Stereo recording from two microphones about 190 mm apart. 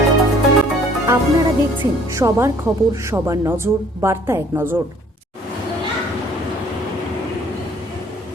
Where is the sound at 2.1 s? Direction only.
15° right (ahead or behind).